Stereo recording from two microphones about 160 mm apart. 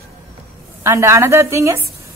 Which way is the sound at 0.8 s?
15° right (ahead or behind).